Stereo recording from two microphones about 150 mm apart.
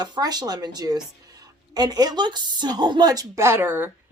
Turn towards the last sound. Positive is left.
turn(degrees=-15)  # may be behind; listen again after turning